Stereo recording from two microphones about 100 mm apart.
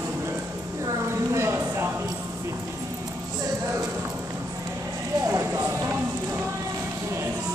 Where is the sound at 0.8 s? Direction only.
30° right (ahead or behind).